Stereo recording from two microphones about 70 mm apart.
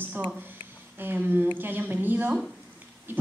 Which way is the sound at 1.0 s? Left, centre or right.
Right.